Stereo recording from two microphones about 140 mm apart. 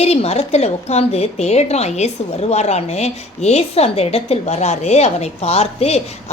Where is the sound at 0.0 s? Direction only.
50° left (ahead or behind).